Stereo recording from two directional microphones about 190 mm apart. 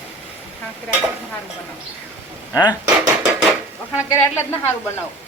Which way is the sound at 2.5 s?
20° left (ahead or behind).